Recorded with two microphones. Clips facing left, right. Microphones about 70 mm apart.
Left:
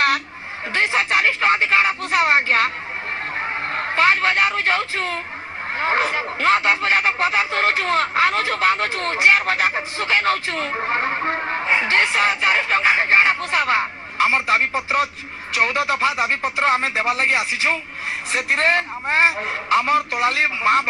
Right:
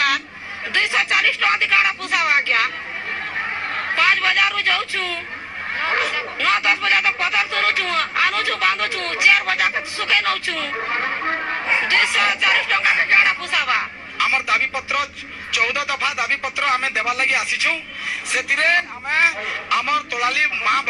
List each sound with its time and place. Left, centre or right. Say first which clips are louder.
0.7 s a sound: left 1 dB; left
3.7 s a man's voice: left 2 dB; left
11.1 s music: left 1 dB; centre
11.4 s speech: left 1 dB; left